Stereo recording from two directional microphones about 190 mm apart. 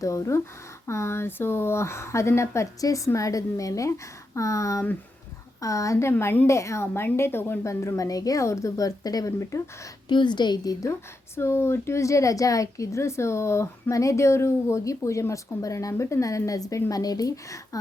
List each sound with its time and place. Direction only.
0.0 s a woman's voice: 15° left (ahead or behind)